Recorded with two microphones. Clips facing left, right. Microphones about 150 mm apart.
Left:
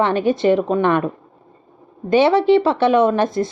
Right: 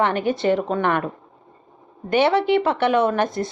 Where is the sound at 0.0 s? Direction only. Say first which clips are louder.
Left 4 dB; 25° left (ahead or behind).